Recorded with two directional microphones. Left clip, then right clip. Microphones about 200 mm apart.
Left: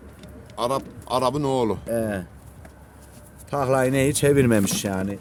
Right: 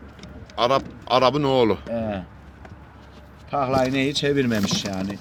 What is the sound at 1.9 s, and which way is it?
Speech, 80° left.